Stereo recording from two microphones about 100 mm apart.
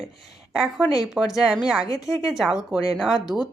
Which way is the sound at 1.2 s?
15° right (ahead or behind).